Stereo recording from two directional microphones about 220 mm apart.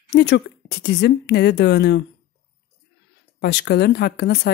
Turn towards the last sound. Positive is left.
turn(degrees=50)  # may be behind; listen again after turning